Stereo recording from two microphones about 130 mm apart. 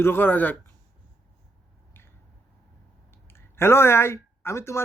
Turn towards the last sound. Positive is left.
turn(degrees=20)  # may be behind; listen again after turning